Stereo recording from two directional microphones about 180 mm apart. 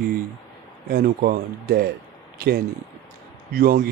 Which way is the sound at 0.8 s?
55° right (ahead or behind).